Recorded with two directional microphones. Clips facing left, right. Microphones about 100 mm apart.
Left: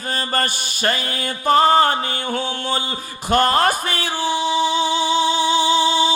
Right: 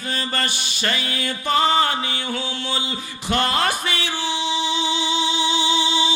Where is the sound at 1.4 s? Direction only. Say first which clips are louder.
Left 5 dB; 40° left (ahead or behind).